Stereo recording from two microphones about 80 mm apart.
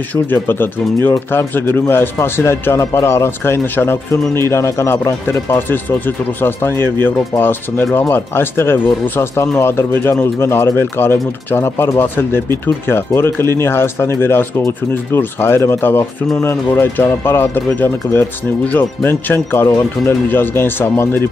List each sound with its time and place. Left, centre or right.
0.1 s a man's voice: left